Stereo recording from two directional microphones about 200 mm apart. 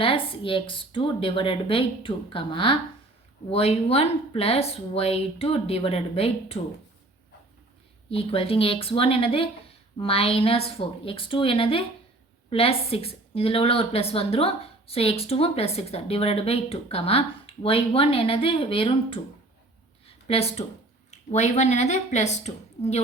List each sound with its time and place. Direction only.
0.0 s a woman's voice: 25° left (ahead or behind)
8.1 s a woman's voice: 30° left (ahead or behind)
20.2 s a woman's voice: 30° left (ahead or behind)